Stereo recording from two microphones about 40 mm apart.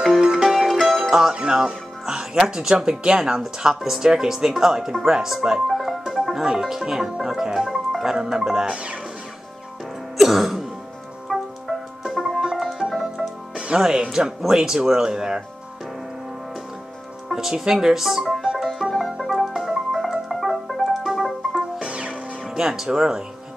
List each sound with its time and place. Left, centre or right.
0.2 s music: centre
0.5 s music: centre
1.3 s speech: centre
5.7 s music: centre
8.0 s speech: centre
10.1 s music: centre
13.6 s speech: centre
17.3 s music: centre
19.5 s music: centre
21.7 s music: right